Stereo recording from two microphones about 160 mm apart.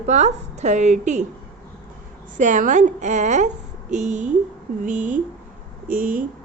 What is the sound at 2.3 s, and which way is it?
A woman's voice, 50° right (ahead or behind).